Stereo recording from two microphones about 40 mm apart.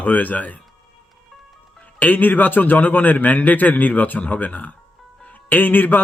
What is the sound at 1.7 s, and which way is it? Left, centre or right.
A man's voice, left.